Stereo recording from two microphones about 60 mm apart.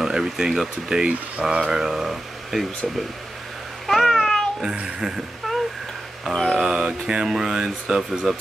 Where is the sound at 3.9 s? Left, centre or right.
Centre.